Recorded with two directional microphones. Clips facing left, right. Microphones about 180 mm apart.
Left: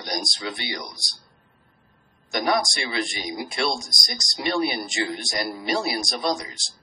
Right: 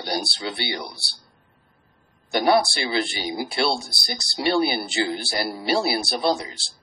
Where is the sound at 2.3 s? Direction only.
35° right (ahead or behind).